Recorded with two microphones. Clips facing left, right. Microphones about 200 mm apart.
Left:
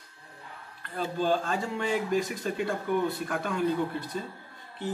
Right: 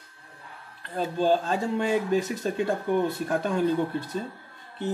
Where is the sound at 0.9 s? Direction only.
30° right (ahead or behind).